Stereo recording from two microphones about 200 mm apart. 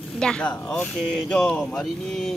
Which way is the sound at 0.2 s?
5° left (ahead or behind).